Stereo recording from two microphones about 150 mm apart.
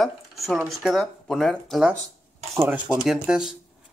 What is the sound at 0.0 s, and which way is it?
Speech, centre (ahead or behind).